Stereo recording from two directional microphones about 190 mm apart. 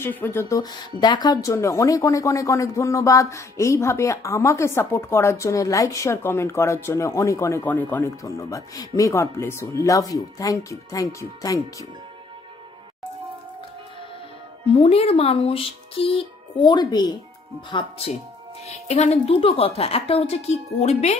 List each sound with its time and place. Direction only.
0.0 s speech: 10° left (ahead or behind)
14.7 s speech: 30° left (ahead or behind)